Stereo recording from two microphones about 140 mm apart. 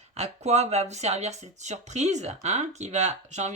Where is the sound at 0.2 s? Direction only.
50° right (ahead or behind).